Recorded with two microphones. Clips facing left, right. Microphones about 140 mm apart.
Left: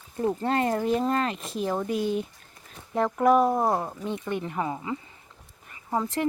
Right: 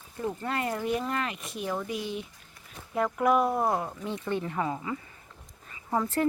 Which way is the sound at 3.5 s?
20° left (ahead or behind).